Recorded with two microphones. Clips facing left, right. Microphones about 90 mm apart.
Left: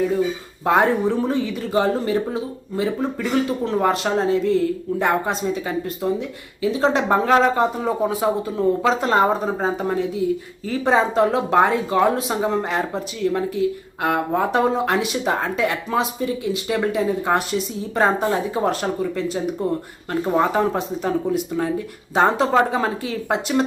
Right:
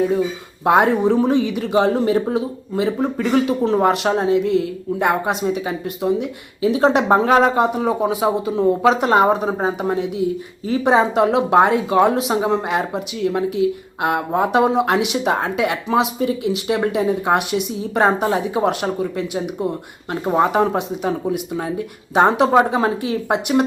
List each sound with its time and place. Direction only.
0.6 s speech: 15° right (ahead or behind)